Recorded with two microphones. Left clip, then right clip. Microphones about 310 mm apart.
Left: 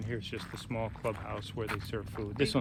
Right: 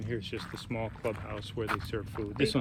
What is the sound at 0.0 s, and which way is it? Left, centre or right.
Speech, left.